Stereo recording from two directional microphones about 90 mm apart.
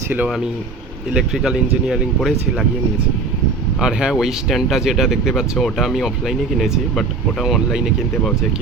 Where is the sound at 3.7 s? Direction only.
10° right (ahead or behind).